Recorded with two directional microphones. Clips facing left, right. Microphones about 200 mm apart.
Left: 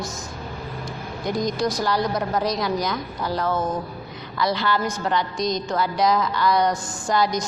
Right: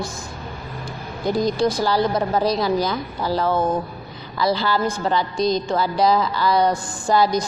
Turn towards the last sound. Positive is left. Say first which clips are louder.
# right 4 dB
turn(degrees=-30)  # may be behind; listen again after turning